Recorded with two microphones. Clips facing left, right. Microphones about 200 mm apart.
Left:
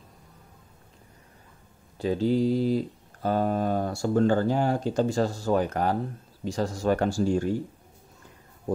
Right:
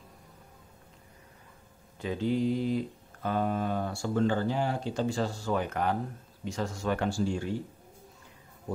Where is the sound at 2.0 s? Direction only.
35° left (ahead or behind).